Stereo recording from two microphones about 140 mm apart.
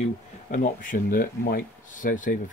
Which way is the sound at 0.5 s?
70° left (ahead or behind).